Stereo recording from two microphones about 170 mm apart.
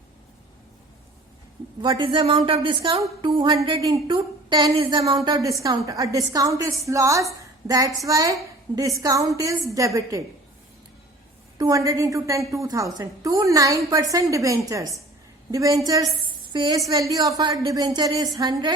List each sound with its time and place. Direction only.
1.8 s a woman's voice: 30° right (ahead or behind)
11.5 s a woman's voice: 20° right (ahead or behind)